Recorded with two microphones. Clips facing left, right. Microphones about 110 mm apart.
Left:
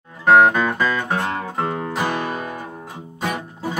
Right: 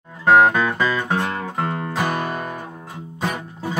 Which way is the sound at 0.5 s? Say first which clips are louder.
Even; 5° left (ahead or behind).